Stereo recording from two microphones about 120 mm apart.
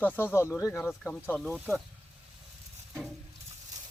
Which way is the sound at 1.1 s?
5° left (ahead or behind).